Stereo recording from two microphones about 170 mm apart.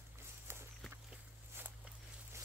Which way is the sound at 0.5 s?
15° right (ahead or behind).